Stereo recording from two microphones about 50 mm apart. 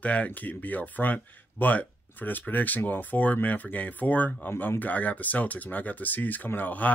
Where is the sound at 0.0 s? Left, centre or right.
Left.